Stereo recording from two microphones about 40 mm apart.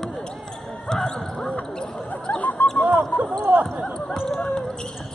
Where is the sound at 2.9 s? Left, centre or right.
Right.